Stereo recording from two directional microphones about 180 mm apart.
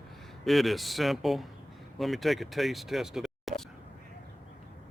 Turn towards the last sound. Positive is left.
turn(degrees=0)  # may be behind; listen again after turning